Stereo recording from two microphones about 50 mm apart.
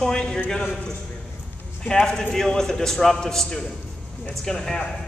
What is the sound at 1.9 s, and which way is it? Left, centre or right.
A man's voice, centre.